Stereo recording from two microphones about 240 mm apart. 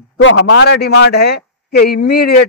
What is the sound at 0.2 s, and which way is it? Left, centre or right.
A man's voice, left.